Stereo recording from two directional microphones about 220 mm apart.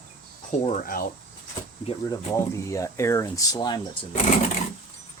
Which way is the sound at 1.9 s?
15° left (ahead or behind).